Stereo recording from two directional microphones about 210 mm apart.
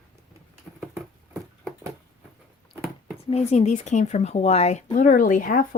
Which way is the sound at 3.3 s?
30° left (ahead or behind).